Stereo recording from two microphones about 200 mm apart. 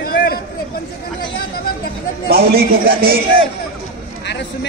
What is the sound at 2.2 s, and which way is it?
Speech, 50° right (ahead or behind).